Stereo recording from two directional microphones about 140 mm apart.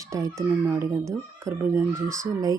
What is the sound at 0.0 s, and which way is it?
Speech, 25° right (ahead or behind).